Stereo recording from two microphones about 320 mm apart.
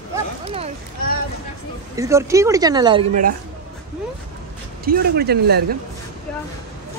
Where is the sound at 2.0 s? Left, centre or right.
Centre; by 3.4 s right.